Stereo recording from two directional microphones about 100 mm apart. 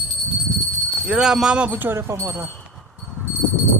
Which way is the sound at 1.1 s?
5° right (ahead or behind).